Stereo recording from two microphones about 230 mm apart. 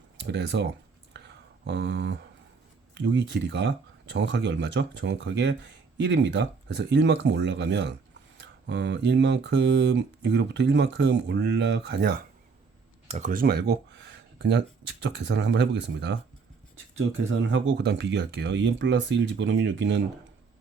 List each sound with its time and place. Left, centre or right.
0.2 s speech: right
1.1 s a sound: right
2.9 s speech: right
13.1 s speech: right
17.5 s speech: right